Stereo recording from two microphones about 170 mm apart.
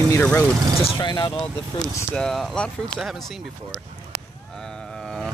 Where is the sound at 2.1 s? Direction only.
Centre (ahead or behind).